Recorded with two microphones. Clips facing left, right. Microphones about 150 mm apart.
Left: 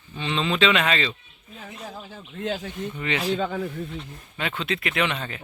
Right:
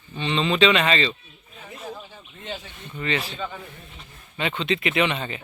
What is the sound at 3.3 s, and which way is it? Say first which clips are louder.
Speech: left 7 dB; 85° left.